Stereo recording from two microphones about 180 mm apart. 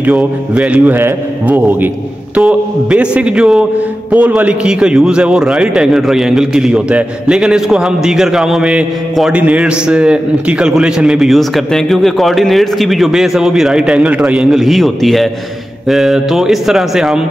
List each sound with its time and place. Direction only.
0.0 s a man's voice: 5° right (ahead or behind)